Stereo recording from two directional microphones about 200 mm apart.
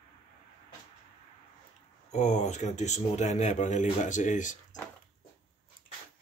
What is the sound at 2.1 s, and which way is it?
Speech, 35° left (ahead or behind).